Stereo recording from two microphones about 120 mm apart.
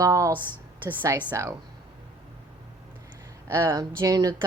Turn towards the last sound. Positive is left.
turn(degrees=-30)  # may be behind; listen again after turning